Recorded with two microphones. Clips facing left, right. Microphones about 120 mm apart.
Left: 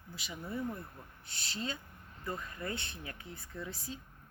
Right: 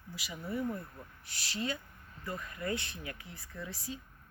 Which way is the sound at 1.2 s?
25° left (ahead or behind).